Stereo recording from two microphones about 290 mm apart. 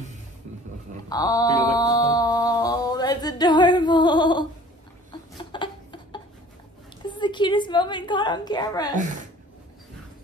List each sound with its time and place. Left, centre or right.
1.0 s mantra: centre
5.4 s a sound: centre
7.0 s a woman's voice: centre
8.9 s speech: right